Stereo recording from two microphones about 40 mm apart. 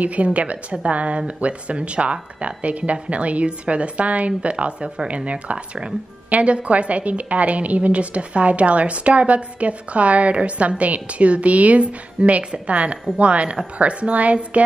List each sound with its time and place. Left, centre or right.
0.0 s a woman's voice: right